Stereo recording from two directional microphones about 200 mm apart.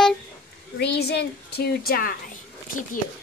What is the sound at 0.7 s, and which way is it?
A woman's voice, 55° left (ahead or behind).